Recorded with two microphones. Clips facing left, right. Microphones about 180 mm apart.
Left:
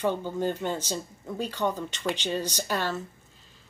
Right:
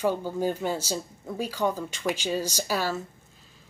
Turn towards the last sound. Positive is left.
turn(degrees=-10)  # may be behind; listen again after turning